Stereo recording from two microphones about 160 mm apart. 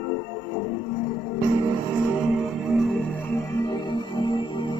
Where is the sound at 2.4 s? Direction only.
Centre (ahead or behind).